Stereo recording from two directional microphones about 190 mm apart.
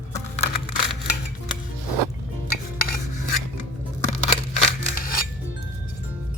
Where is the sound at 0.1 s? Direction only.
40° left (ahead or behind).